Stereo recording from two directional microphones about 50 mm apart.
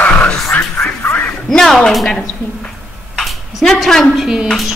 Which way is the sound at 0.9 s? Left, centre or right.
Left.